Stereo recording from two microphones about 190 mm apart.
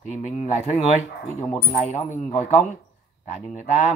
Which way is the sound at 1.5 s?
35° left (ahead or behind).